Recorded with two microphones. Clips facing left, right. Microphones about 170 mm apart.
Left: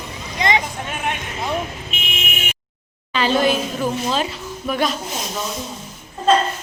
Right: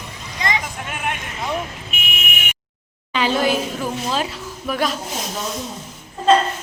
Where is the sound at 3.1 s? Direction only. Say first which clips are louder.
Left 1 dB; 15° right (ahead or behind).